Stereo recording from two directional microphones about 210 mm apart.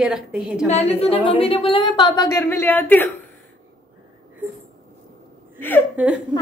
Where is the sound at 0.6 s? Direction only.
30° left (ahead or behind); by 3.1 s 10° left (ahead or behind).